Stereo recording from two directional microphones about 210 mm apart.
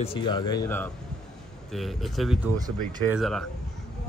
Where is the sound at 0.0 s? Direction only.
25° left (ahead or behind).